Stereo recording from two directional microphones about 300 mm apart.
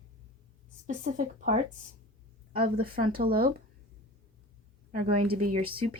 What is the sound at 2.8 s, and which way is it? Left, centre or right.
Speech, right.